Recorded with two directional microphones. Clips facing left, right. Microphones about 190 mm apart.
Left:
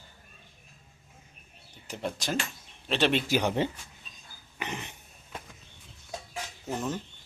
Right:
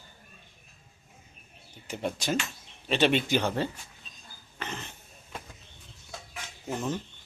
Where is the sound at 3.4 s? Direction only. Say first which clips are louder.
Left 1 dB; 15° left (ahead or behind).